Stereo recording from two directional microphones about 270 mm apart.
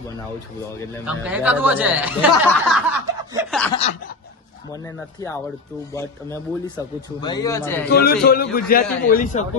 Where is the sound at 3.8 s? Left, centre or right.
Left.